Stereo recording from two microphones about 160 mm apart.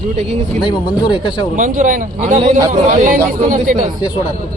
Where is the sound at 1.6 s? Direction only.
55° right (ahead or behind).